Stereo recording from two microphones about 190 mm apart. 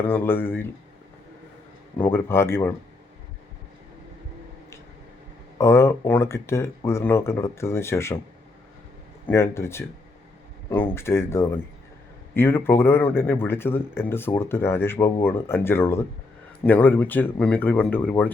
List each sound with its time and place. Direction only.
0.1 s speech: 10° left (ahead or behind)
2.0 s speech: 10° left (ahead or behind)
5.5 s speech: 15° left (ahead or behind)
9.2 s speech: 15° left (ahead or behind)